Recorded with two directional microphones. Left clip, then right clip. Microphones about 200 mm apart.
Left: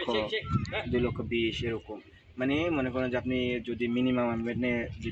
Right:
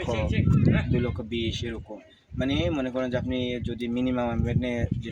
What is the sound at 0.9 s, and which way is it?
Speech, 10° right (ahead or behind).